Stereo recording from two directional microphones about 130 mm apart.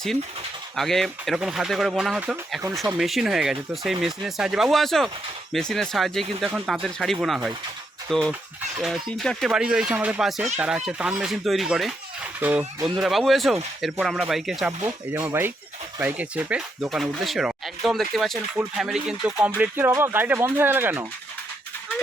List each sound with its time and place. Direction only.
0.8 s speech: centre (ahead or behind)
13.0 s speech: centre (ahead or behind)
14.8 s speech: 25° right (ahead or behind)